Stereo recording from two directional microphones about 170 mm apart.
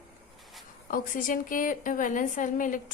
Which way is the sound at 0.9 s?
55° left (ahead or behind).